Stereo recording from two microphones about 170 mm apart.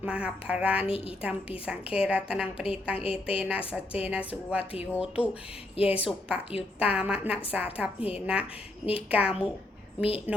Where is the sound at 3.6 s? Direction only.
35° left (ahead or behind).